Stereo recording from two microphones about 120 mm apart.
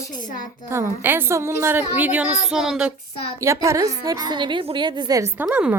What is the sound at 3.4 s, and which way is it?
A woman's voice, 25° right (ahead or behind).